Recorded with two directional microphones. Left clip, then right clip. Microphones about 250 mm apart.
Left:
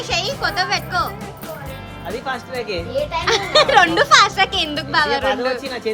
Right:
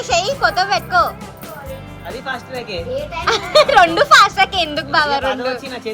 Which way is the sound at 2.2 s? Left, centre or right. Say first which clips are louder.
Even; left.